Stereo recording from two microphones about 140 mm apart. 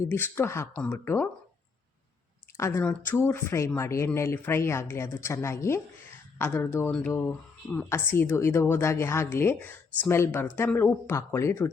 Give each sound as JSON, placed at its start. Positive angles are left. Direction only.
{"t": 0.0, "sound": "speech", "side_deg": 15}
{"t": 2.6, "sound": "speech", "side_deg": 20}
{"t": 2.8, "sound": "speech", "side_deg": 10}